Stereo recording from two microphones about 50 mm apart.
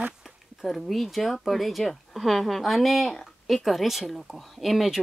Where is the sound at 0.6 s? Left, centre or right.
Centre.